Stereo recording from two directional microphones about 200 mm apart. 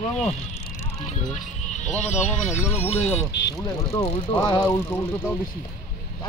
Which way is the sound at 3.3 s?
55° left (ahead or behind).